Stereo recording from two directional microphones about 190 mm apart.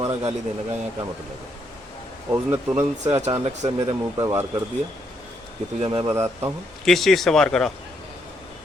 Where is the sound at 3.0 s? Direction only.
35° right (ahead or behind).